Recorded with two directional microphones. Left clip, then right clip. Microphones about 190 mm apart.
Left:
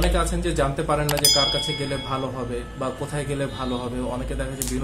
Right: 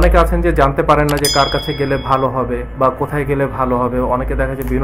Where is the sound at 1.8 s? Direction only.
35° right (ahead or behind).